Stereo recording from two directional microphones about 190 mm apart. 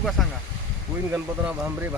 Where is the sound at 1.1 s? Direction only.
10° right (ahead or behind).